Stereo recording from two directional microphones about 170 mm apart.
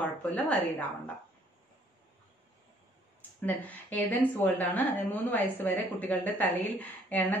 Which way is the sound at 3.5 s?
10° left (ahead or behind).